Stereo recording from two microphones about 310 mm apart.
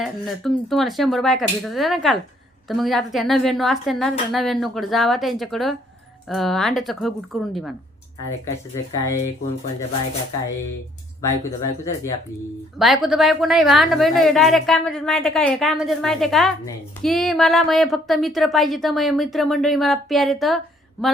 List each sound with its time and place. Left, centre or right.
0.0 s a woman's voice: centre
11.2 s speech: centre
12.8 s a woman's voice: centre